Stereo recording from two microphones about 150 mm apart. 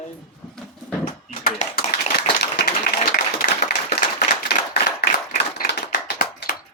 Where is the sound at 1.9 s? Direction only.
90° left.